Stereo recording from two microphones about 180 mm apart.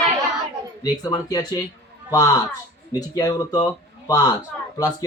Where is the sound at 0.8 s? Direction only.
20° left (ahead or behind).